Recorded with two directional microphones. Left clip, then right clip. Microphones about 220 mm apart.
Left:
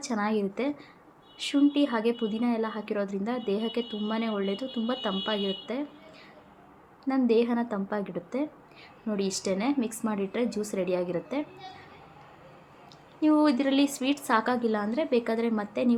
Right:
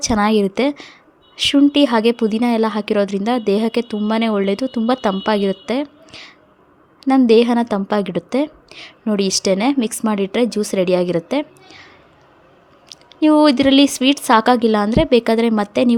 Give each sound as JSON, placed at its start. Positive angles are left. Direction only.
{"t": 0.0, "sound": "a woman's voice", "side_deg": -45}
{"t": 12.9, "sound": "a woman's voice", "side_deg": -45}